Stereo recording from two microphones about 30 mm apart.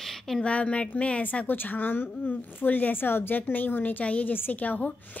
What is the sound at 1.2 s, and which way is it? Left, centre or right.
A woman's voice, left.